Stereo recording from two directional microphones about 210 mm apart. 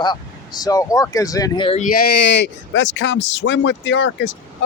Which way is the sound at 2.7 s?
60° left (ahead or behind).